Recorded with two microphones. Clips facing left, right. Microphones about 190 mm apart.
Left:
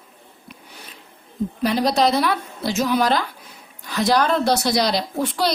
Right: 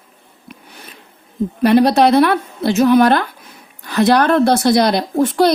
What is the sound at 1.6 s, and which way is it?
A woman's voice, 60° right (ahead or behind).